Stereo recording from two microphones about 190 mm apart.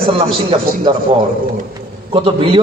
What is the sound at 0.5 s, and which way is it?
Speech, 30° right (ahead or behind).